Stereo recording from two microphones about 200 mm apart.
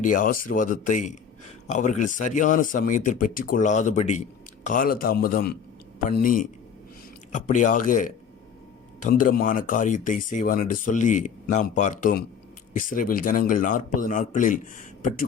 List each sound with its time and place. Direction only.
0.0 s a man's voice: 40° left (ahead or behind)